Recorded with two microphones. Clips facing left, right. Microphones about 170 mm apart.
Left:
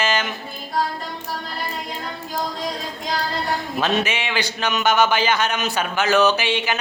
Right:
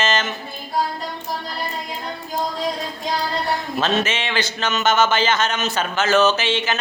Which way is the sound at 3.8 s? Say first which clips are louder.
Even; 15° left (ahead or behind).